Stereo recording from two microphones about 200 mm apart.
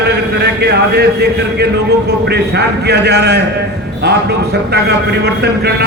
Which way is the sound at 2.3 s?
55° right (ahead or behind).